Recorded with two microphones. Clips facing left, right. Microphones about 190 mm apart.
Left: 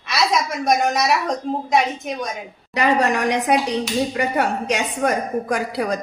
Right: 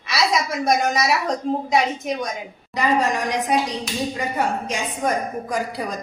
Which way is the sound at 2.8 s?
65° left (ahead or behind).